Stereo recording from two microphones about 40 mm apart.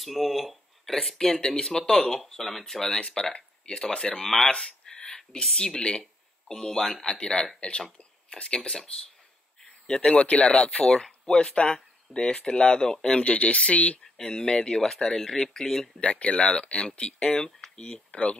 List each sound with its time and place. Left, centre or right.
0.0 s a sound: centre
0.9 s speech: centre
3.0 s speech: left
4.2 s speech: centre
4.5 s a sound: centre
5.6 s speech: left
6.5 s speech: centre
7.2 s speech: left
13.2 s speech: left
14.1 s speech: centre
16.0 s speech: left